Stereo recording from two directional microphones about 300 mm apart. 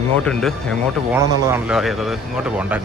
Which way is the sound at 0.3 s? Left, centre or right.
Centre.